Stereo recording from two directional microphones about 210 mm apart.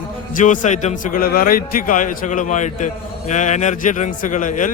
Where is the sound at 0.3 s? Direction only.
35° left (ahead or behind).